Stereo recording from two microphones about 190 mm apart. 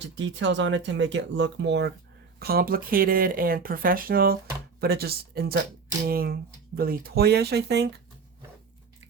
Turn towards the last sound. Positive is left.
turn(degrees=-60)  # may be behind; listen again after turning